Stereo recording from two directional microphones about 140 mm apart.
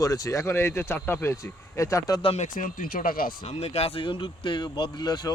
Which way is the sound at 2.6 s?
85° left.